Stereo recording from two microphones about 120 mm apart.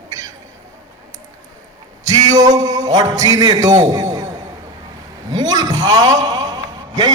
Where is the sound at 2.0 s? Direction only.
30° right (ahead or behind).